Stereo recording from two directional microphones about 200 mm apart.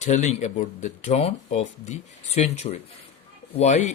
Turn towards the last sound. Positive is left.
turn(degrees=35)  # may be behind; listen again after turning